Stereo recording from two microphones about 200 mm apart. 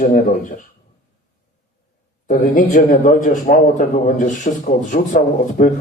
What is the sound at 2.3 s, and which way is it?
Speech, 40° left (ahead or behind).